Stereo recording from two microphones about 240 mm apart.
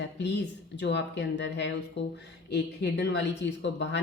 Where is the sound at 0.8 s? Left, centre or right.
Left.